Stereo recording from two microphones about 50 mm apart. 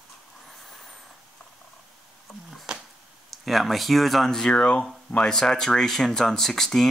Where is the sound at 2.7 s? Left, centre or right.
Centre.